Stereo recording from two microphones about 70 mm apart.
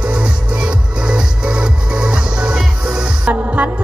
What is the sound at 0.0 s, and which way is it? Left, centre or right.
Music, centre.